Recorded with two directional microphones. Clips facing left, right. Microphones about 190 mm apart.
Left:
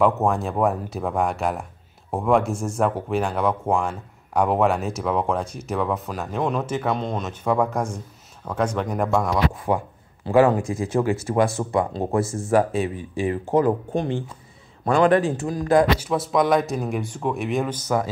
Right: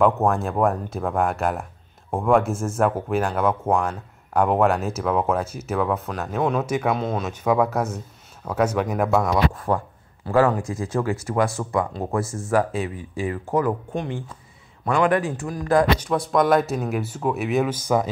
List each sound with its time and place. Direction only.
0.0 s speech: centre (ahead or behind)
9.7 s speech: 20° left (ahead or behind)
16.0 s speech: 5° left (ahead or behind); by 18.1 s 15° right (ahead or behind)